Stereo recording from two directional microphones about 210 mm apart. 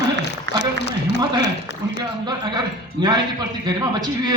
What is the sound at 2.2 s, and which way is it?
A man's voice, 20° right (ahead or behind).